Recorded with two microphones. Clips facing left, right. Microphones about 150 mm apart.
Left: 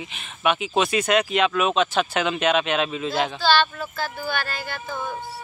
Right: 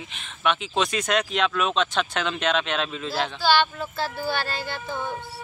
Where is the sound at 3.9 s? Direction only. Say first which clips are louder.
Right 1 dB; 30° right (ahead or behind).